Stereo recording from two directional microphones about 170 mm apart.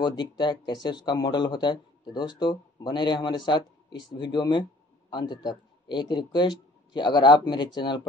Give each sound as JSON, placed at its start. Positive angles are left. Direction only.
{"t": 0.0, "sound": "speech", "side_deg": 25}